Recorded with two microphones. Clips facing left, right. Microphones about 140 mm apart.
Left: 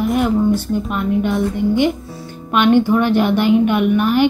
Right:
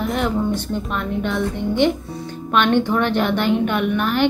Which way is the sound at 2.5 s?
10° left (ahead or behind).